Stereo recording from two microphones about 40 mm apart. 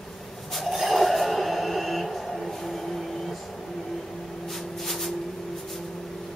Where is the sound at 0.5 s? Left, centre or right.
Centre.